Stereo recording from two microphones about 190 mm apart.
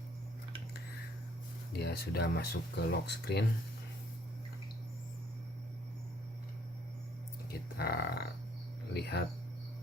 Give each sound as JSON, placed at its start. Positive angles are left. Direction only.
{"t": 1.7, "sound": "speech", "side_deg": 55}
{"t": 7.5, "sound": "speech", "side_deg": 55}